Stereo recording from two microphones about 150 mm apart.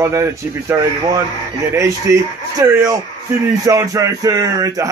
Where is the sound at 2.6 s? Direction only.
25° right (ahead or behind).